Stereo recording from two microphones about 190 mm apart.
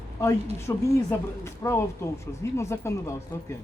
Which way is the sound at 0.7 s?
15° left (ahead or behind).